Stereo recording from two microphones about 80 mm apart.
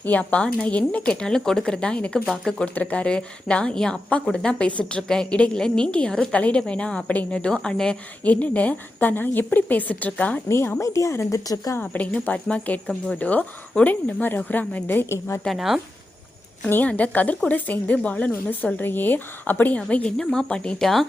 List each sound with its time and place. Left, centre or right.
0.0 s speech: centre
2.7 s a woman's voice: centre
10.5 s speech: left
11.8 s a woman's voice: centre
15.4 s speech: centre
16.6 s a woman's voice: left; by 21.0 s centre